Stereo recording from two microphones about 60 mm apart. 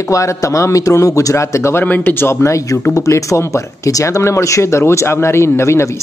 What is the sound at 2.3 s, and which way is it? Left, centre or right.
Speech, left.